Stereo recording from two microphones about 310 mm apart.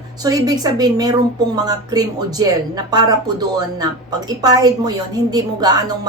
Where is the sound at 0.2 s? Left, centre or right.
Centre.